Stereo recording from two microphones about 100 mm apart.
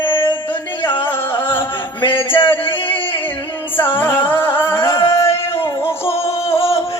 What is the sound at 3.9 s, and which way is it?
Music, 20° left (ahead or behind).